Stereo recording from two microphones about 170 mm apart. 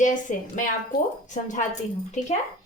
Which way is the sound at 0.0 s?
50° left (ahead or behind).